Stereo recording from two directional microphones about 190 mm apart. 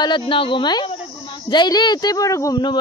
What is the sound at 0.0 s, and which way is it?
Speech, 25° left (ahead or behind).